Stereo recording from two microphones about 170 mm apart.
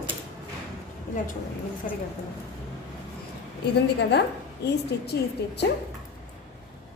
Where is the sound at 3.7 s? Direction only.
75° left (ahead or behind).